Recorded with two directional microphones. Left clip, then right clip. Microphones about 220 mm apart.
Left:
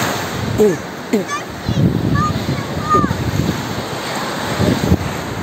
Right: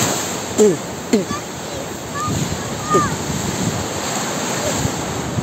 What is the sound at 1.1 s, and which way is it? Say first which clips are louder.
Speech: even; 10° right (ahead or behind).